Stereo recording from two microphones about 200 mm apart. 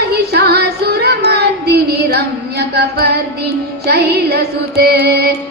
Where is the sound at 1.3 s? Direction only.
55° right (ahead or behind).